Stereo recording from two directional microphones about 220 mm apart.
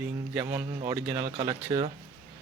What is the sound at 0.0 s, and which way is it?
Speech, 5° right (ahead or behind).